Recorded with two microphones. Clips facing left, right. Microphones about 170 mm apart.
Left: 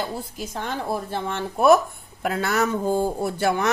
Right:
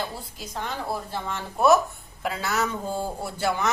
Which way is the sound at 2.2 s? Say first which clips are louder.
Left 4 dB; 50° left (ahead or behind).